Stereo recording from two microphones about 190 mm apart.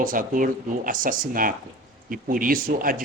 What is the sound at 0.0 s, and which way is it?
Speech, 45° right (ahead or behind).